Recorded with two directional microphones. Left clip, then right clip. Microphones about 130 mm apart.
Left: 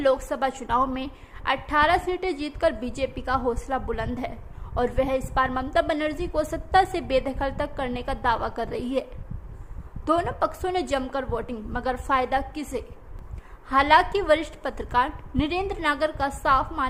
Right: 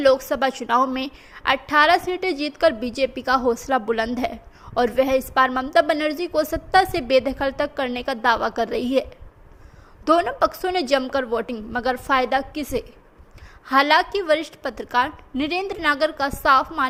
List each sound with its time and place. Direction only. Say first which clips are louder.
0.0 s a woman's voice: right 5 dB; 20° right (ahead or behind)
10.1 s a woman's voice: right 5 dB; 15° right (ahead or behind)